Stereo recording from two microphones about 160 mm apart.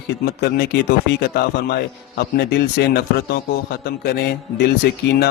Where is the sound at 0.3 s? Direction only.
90° left.